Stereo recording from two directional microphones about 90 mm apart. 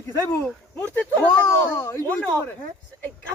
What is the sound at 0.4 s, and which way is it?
Speech, 15° left (ahead or behind).